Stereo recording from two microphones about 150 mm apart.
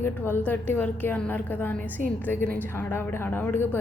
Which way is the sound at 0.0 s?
15° left (ahead or behind).